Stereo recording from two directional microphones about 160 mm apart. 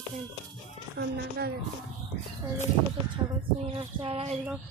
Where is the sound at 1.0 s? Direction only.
90° right.